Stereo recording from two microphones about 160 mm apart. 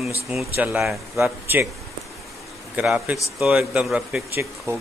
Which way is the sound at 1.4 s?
10° right (ahead or behind).